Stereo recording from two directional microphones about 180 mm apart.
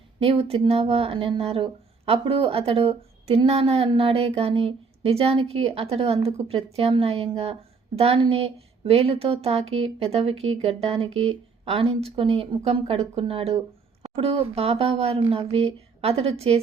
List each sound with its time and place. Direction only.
0.2 s speech: 35° right (ahead or behind)